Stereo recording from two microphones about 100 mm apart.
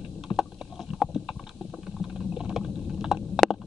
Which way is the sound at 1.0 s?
5° right (ahead or behind).